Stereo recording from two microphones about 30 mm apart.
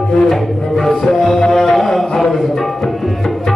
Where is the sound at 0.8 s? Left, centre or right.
Centre.